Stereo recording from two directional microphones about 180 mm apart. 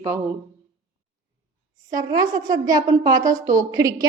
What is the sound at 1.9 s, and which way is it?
A woman's voice, 20° right (ahead or behind).